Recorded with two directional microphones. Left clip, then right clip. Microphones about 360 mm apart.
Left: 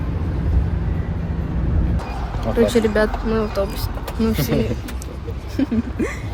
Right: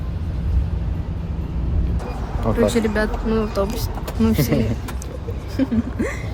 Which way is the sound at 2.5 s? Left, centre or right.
Centre.